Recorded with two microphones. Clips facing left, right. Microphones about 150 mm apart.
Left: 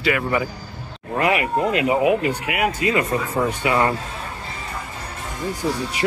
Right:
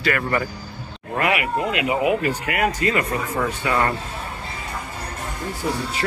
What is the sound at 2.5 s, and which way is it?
Speech, 10° left (ahead or behind).